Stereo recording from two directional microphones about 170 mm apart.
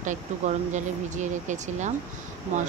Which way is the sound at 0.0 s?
45° right (ahead or behind).